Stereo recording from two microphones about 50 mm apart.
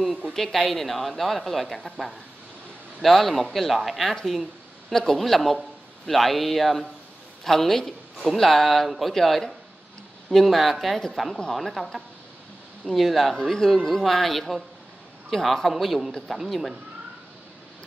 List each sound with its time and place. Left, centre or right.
0.3 s a man's voice: centre